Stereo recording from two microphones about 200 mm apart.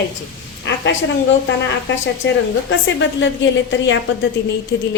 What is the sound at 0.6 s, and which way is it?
Speech, 65° left (ahead or behind).